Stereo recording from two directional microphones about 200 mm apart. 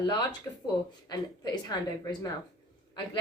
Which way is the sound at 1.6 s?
20° left (ahead or behind).